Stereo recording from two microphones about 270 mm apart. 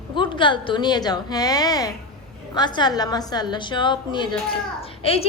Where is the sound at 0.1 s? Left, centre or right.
Centre.